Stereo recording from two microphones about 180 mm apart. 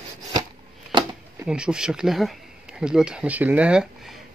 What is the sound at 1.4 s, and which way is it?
Speech, 5° right (ahead or behind).